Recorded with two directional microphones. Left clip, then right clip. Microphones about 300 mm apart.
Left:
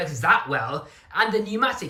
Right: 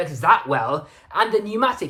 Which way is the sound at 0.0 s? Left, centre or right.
Centre.